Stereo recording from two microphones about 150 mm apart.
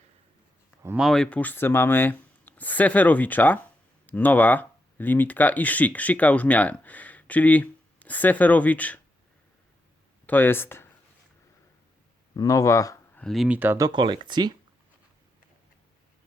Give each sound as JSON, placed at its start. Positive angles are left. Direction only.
{"t": 0.9, "sound": "speech", "side_deg": 0}
{"t": 10.2, "sound": "speech", "side_deg": 15}
{"t": 12.4, "sound": "speech", "side_deg": 20}
{"t": 13.1, "sound": "speech", "side_deg": 0}
{"t": 13.6, "sound": "speech", "side_deg": -15}
{"t": 13.8, "sound": "speech", "side_deg": -30}